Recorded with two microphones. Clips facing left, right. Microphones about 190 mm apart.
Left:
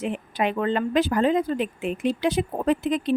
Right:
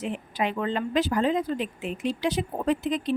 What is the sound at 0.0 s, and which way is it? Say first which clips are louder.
Speech: left 3 dB; 55° left (ahead or behind).